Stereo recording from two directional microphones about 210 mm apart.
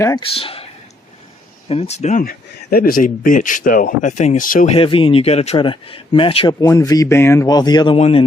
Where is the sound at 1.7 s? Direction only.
30° left (ahead or behind).